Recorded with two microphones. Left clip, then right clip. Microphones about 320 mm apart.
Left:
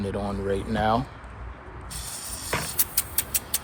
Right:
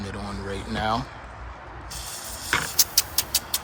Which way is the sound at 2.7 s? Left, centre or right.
Centre.